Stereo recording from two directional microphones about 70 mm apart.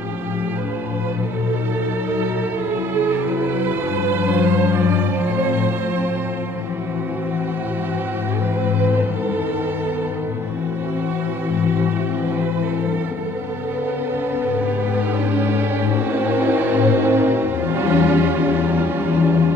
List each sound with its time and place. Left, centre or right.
3.0 s music: right
8.6 s music: right
15.0 s music: right